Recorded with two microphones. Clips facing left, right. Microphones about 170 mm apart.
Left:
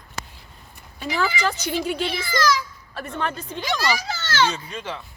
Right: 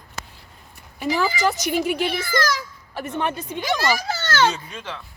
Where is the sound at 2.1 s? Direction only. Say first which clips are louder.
Left 1 dB; 50° right (ahead or behind).